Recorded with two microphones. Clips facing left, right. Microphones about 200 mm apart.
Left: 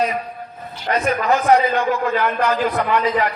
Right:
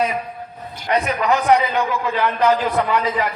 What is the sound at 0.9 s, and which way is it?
Speech, 45° left (ahead or behind).